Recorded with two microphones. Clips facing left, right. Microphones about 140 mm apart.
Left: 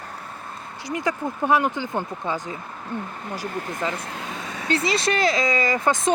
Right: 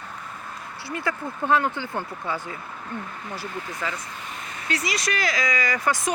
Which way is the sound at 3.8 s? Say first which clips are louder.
Left 4 dB; 25° left (ahead or behind).